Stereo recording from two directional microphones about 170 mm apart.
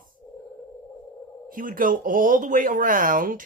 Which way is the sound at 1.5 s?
55° right (ahead or behind).